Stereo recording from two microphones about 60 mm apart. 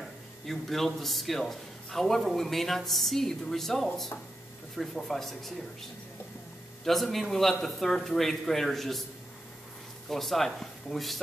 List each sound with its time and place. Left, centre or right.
0.0 s speech: centre
6.8 s speech: centre
10.0 s speech: centre